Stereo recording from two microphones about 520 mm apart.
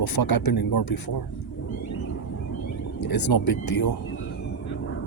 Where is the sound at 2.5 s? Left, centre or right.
Left.